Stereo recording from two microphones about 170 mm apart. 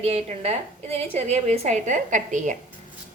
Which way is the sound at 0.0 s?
40° right (ahead or behind).